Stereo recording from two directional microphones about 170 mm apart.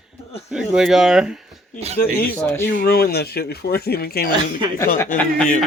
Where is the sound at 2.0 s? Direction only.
60° left (ahead or behind).